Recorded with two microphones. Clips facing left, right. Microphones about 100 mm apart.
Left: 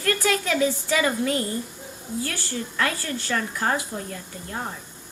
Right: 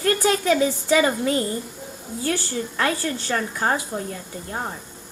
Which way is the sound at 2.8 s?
25° right (ahead or behind).